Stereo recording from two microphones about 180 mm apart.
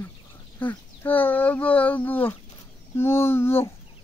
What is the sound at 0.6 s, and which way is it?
Speech, 10° left (ahead or behind).